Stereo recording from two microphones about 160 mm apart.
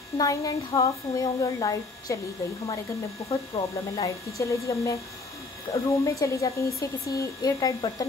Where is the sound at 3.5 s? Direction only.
35° left (ahead or behind).